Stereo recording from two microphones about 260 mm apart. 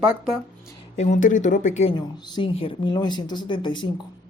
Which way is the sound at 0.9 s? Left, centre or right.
Left.